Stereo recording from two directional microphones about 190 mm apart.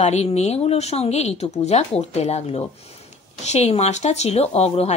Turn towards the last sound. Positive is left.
turn(degrees=35)  # may be behind; listen again after turning